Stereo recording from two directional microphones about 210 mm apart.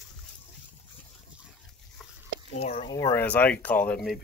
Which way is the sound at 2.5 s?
30° left (ahead or behind).